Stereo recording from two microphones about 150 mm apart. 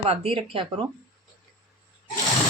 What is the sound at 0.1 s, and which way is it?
Speech, 40° right (ahead or behind).